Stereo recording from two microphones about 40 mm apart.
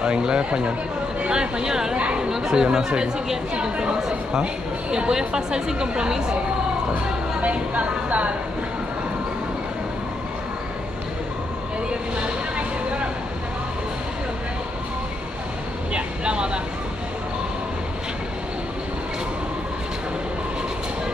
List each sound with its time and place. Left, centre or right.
0.0 s speech: right
2.0 s speech: right
7.4 s a woman's voice: right
12.2 s music: right
15.9 s vehicle: right